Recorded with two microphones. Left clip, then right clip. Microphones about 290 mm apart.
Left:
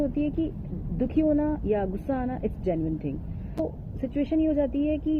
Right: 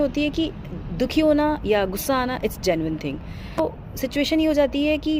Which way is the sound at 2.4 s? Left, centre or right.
Right.